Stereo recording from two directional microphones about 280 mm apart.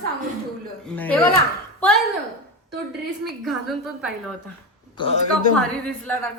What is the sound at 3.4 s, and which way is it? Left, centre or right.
Speech, centre.